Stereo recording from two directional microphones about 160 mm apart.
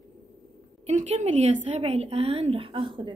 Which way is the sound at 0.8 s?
45° right (ahead or behind).